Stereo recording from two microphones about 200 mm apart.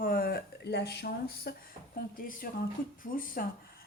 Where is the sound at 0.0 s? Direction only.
45° left (ahead or behind).